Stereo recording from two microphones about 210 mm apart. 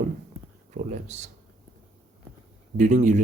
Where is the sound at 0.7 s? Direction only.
35° right (ahead or behind).